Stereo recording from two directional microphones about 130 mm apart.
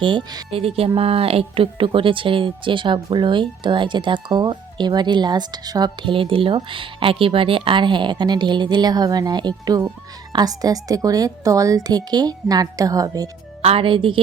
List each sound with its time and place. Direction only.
0.0 s speech: 35° right (ahead or behind)
0.5 s a woman's voice: 50° right (ahead or behind); by 13.3 s 25° right (ahead or behind)
13.6 s a woman's voice: 45° right (ahead or behind)